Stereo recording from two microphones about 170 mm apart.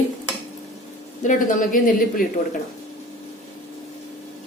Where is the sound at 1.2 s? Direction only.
55° left (ahead or behind).